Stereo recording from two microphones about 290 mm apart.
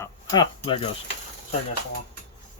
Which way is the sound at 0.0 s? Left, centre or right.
Centre.